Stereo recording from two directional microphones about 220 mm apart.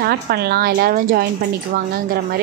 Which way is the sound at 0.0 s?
45° right (ahead or behind).